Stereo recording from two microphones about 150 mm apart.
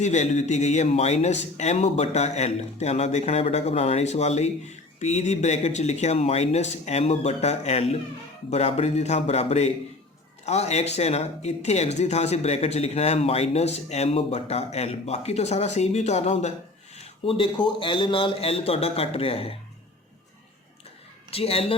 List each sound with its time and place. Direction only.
0.0 s speech: 50° left (ahead or behind)
21.2 s speech: 40° left (ahead or behind)